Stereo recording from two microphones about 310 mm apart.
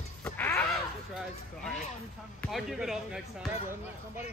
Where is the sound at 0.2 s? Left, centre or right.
Centre.